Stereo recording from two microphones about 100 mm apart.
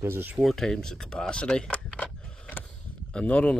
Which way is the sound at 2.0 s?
10° left (ahead or behind).